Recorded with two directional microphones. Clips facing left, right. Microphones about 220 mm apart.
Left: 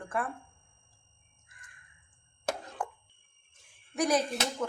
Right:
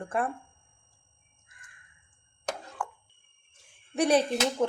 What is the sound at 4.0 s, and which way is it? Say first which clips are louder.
Speech: right 4 dB; 30° right (ahead or behind).